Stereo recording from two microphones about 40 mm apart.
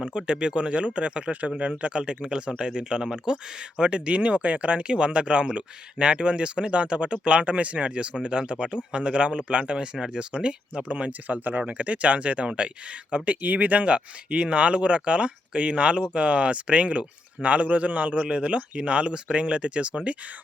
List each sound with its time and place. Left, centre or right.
0.1 s speech: right
11.3 s speech: right
11.6 s speech: right